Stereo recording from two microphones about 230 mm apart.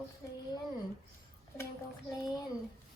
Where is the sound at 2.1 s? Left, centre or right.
Centre.